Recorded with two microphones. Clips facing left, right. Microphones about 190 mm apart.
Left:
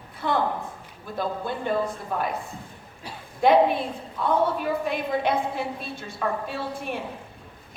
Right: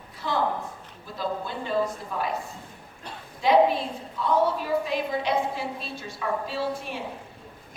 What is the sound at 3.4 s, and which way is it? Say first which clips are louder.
A woman's voice: left 1 dB; 55° left (ahead or behind).